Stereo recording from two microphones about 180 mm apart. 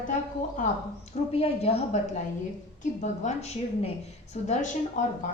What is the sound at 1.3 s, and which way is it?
Speech, 35° left (ahead or behind).